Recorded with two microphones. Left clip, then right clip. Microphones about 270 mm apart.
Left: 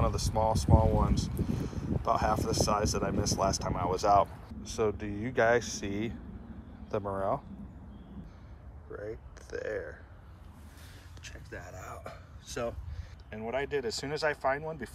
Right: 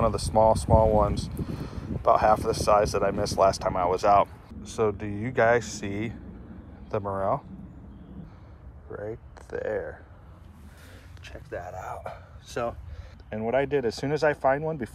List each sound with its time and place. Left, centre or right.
0.0 s speech: centre
8.9 s speech: centre
11.5 s speech: centre
13.7 s speech: left